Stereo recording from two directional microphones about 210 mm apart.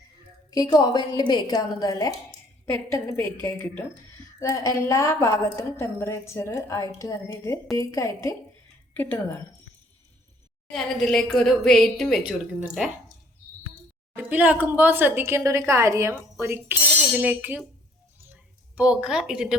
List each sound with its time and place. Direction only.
0.5 s a woman's voice: 15° left (ahead or behind)
10.7 s a woman's voice: centre (ahead or behind)
14.2 s a woman's voice: 10° right (ahead or behind)
18.8 s a woman's voice: 5° right (ahead or behind)